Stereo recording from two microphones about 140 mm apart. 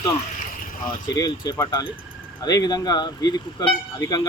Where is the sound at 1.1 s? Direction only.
30° left (ahead or behind).